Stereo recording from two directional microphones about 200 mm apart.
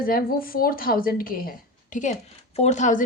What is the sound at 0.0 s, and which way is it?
A woman's voice, 45° left (ahead or behind).